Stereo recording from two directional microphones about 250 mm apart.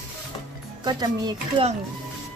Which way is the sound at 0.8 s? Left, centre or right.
Centre.